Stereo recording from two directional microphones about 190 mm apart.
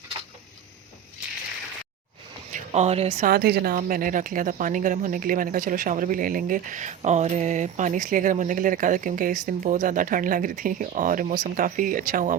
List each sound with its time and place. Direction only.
2.5 s speech: 35° right (ahead or behind)
3.2 s speech: 55° right (ahead or behind)